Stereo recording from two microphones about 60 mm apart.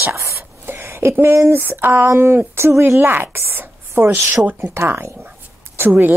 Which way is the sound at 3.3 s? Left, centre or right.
Right.